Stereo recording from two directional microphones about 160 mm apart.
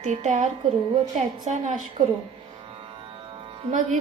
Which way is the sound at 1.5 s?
45° right (ahead or behind).